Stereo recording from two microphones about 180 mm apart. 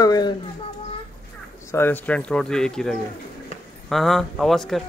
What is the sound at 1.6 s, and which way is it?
Speech, 10° left (ahead or behind).